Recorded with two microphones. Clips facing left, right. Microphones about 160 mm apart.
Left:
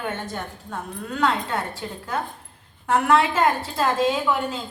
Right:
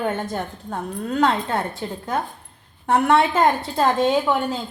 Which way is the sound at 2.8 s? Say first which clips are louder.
Right 2 dB; 30° right (ahead or behind).